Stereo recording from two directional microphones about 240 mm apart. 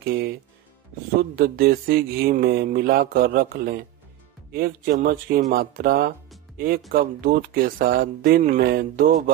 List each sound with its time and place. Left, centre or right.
0.0 s speech: right
1.3 s mantra: right
5.5 s speech: right
6.9 s mantra: right